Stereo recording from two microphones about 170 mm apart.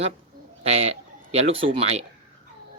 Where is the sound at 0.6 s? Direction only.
40° right (ahead or behind).